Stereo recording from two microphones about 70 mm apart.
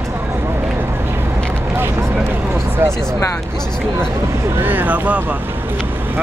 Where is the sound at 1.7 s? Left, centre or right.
Right.